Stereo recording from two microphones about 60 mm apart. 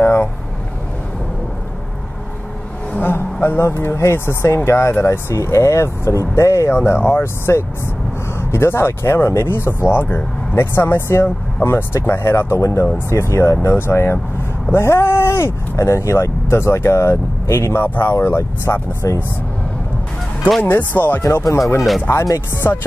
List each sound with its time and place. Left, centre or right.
0.0 s vehicle: left
3.0 s speech: left
6.7 s speech: left
17.7 s speech: left
20.7 s speech: left
21.2 s speech: left
22.7 s music: left